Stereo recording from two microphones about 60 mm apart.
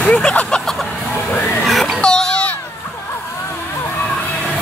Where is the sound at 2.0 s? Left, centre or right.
Centre.